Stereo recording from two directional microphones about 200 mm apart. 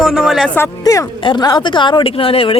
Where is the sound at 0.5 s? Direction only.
15° left (ahead or behind).